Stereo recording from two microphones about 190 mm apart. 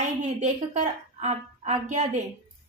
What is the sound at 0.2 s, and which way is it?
A woman's voice, 40° right (ahead or behind).